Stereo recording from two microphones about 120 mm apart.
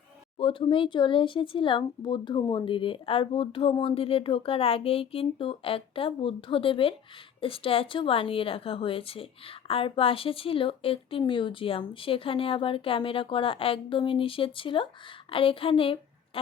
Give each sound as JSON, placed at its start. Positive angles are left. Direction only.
{"t": 0.3, "sound": "a woman's voice", "side_deg": 45}